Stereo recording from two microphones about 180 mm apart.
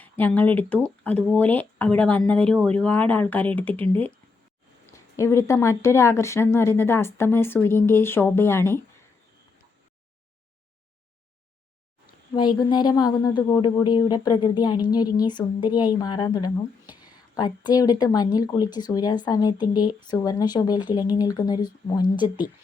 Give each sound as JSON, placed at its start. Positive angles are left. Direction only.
{"t": 0.0, "sound": "speech", "side_deg": 10}
{"t": 4.9, "sound": "speech", "side_deg": 15}
{"t": 12.3, "sound": "speech", "side_deg": 25}